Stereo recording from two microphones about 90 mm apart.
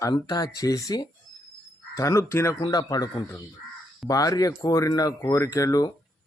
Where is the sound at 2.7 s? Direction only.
45° left (ahead or behind).